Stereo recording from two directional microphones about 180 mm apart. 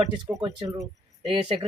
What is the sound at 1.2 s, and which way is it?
Speech, 25° right (ahead or behind).